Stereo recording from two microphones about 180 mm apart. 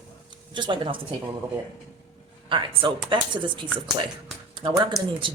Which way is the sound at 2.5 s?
25° right (ahead or behind).